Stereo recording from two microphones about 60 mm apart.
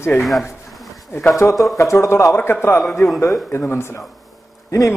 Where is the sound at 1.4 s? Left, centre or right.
Left.